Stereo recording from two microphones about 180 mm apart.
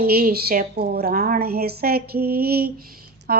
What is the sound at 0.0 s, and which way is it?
A woman's voice, 55° right (ahead or behind).